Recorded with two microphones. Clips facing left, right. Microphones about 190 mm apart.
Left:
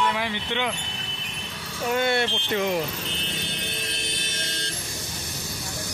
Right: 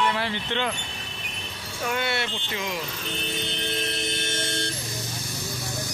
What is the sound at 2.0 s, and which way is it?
Speech, 45° left (ahead or behind).